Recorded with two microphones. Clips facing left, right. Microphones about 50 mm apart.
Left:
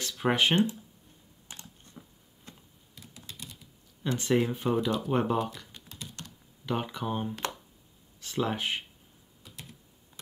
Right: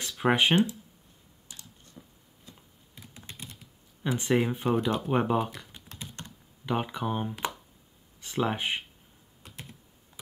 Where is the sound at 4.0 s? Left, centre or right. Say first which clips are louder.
Right 1 dB; centre.